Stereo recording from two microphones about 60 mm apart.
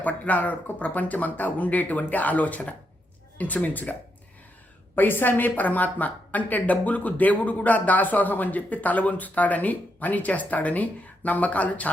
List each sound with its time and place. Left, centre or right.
0.0 s a woman's voice: left
4.9 s a woman's voice: left